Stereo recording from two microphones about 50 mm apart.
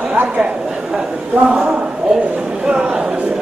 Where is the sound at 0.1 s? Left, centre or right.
Right.